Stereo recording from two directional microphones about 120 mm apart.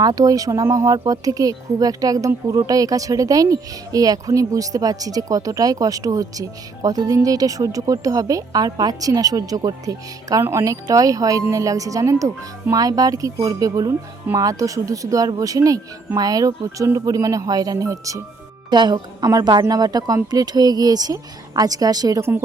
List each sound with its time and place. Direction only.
0.0 s a woman's voice: 30° right (ahead or behind)